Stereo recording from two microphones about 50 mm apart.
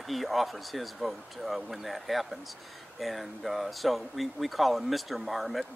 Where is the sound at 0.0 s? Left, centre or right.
Centre.